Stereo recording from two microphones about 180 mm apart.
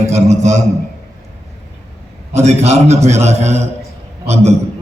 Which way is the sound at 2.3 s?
40° right (ahead or behind).